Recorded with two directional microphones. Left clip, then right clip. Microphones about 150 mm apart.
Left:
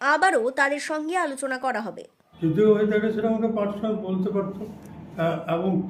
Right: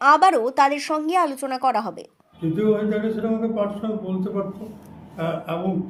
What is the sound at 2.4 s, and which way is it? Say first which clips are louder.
A man's voice: left 2 dB; 5° left (ahead or behind).